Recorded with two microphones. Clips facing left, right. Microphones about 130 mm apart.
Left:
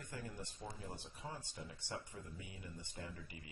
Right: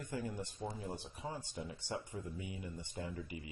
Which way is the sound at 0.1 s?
15° right (ahead or behind).